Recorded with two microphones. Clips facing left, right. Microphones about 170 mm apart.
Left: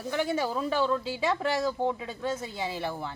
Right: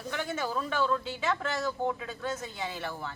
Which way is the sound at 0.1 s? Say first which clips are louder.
Left 5 dB; 30° left (ahead or behind).